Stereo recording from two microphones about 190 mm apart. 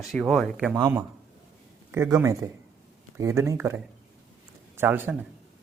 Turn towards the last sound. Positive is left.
turn(degrees=-10)  # may be behind; listen again after turning